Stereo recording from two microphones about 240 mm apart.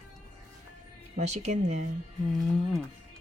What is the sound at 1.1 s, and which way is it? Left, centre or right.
Speech, right.